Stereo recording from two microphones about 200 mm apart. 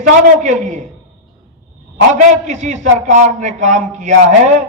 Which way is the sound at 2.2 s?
40° right (ahead or behind).